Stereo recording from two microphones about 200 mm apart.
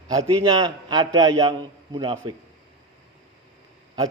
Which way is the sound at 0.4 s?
20° right (ahead or behind).